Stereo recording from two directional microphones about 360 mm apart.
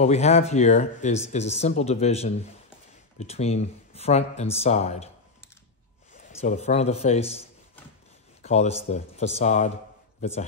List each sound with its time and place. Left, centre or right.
0.0 s speech: centre
6.1 s a man's voice: centre